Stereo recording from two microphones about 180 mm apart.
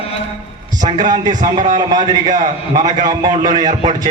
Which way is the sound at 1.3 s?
45° right (ahead or behind).